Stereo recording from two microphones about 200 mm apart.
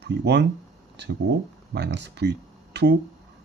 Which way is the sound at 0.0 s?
55° right (ahead or behind).